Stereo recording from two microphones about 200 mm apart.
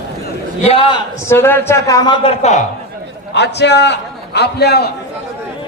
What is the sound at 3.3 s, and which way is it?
A man's voice, 60° left (ahead or behind).